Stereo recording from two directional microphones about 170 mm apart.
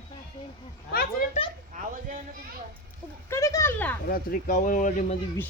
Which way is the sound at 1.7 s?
50° right (ahead or behind).